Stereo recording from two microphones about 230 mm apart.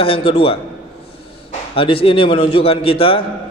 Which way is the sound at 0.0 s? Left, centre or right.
Left.